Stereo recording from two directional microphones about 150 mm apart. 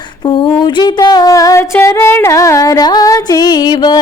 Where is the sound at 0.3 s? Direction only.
30° left (ahead or behind).